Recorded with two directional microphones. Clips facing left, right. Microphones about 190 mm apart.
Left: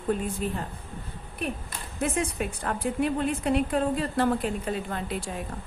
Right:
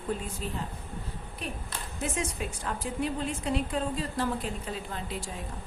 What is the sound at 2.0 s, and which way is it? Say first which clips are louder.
A woman's voice: left 5 dB; 60° left (ahead or behind).